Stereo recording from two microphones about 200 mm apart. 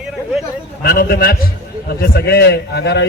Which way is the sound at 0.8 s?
50° left (ahead or behind).